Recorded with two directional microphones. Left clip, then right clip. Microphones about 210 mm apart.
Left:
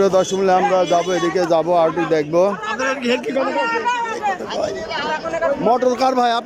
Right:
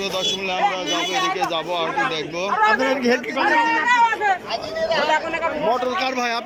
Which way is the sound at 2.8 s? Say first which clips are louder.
Even; 10° right (ahead or behind).